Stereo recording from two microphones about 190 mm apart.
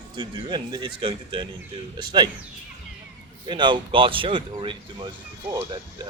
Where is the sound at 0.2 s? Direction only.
25° right (ahead or behind).